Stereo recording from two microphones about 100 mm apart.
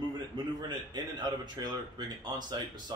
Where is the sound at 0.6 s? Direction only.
45° right (ahead or behind).